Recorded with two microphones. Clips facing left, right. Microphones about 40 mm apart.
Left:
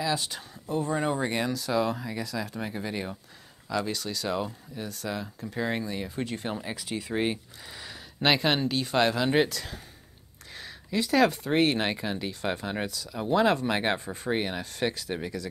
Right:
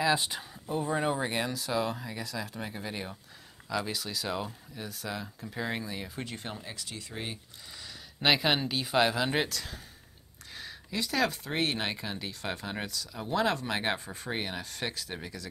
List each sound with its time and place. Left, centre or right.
0.0 s speech: centre
0.7 s speech: centre
6.6 s speech: centre
7.2 s speech: left
8.2 s speech: centre